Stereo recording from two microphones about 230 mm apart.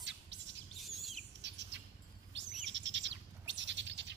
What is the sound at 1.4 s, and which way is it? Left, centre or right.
Bird, right.